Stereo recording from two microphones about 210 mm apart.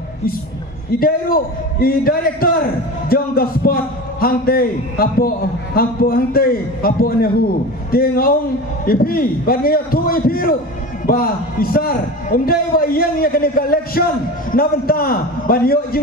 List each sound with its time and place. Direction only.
0.9 s a man's voice: 45° left (ahead or behind)